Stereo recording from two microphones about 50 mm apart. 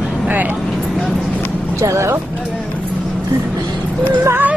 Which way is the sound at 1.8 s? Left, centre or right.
Right.